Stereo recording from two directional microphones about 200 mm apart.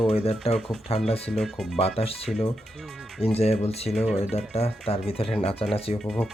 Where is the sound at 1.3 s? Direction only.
Centre (ahead or behind).